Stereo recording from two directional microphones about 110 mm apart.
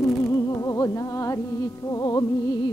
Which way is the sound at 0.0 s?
30° left (ahead or behind).